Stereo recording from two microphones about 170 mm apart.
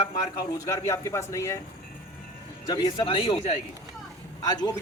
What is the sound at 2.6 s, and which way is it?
Speech, 25° left (ahead or behind).